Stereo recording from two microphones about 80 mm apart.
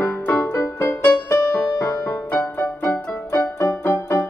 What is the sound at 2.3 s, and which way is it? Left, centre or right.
Music, left.